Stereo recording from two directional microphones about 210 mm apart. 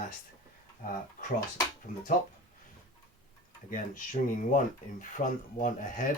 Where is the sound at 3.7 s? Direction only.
40° left (ahead or behind).